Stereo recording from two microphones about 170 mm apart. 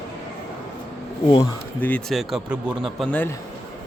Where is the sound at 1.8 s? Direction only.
5° left (ahead or behind).